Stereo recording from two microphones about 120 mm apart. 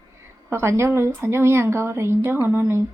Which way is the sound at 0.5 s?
25° right (ahead or behind).